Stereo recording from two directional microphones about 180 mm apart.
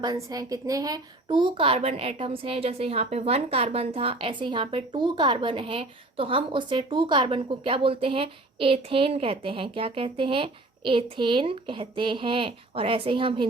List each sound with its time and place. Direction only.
0.0 s a woman's voice: 20° right (ahead or behind)